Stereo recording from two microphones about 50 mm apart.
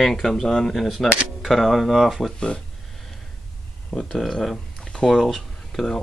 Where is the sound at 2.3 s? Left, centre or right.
Centre.